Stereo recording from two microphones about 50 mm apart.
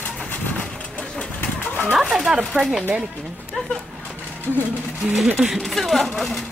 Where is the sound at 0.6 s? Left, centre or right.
Centre.